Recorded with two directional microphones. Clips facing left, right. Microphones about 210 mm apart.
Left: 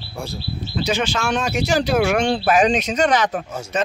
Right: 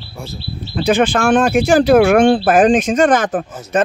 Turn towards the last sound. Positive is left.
turn(degrees=-50)  # may be behind; listen again after turning